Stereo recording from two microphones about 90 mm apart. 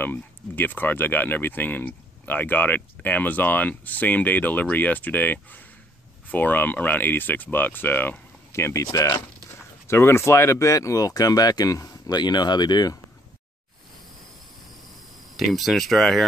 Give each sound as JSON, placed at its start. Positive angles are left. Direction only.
{"t": 0.0, "sound": "speech", "side_deg": 20}
{"t": 9.8, "sound": "speech", "side_deg": 30}
{"t": 15.3, "sound": "speech", "side_deg": 0}